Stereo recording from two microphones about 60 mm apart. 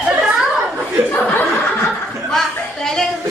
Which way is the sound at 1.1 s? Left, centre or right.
Left.